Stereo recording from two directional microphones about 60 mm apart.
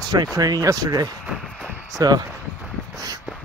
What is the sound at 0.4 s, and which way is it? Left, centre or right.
Speech, right.